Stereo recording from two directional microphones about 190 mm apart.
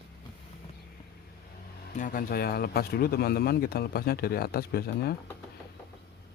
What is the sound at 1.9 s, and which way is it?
Speech, 45° left (ahead or behind).